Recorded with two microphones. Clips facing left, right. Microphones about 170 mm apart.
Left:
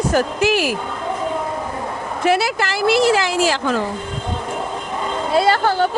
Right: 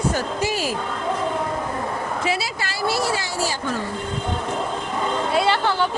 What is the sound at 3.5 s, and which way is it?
Speech, 90° left.